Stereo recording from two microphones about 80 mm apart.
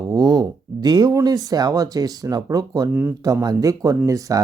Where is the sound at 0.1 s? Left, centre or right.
Right.